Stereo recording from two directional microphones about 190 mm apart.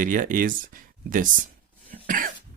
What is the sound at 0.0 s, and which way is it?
Speech, 45° right (ahead or behind).